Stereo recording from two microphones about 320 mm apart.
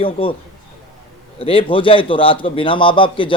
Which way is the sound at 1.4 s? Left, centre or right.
Centre.